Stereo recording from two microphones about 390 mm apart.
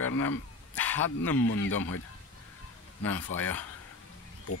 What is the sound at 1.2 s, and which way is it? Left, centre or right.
Speech, left.